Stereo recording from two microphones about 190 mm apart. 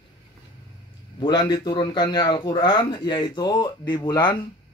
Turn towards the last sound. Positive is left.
turn(degrees=25)  # may be behind; listen again after turning